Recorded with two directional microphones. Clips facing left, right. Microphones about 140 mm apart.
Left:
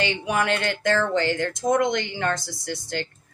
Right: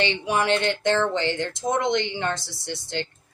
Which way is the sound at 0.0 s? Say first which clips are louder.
Right 1 dB; 25° right (ahead or behind).